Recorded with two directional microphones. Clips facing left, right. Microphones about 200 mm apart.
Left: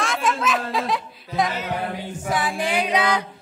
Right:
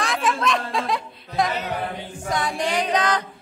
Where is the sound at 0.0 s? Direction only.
Centre (ahead or behind).